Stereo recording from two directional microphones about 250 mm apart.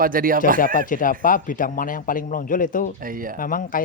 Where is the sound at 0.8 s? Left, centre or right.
Left.